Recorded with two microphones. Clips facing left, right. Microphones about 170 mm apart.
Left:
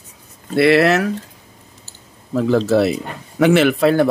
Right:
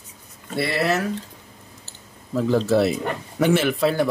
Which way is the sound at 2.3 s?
80° left.